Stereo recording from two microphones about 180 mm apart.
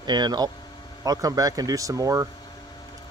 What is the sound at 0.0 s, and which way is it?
Speech, 25° right (ahead or behind).